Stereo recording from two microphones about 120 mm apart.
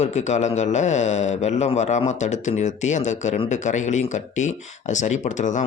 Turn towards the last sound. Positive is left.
turn(degrees=90)